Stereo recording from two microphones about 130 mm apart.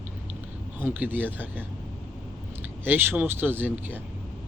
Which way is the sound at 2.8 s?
15° right (ahead or behind).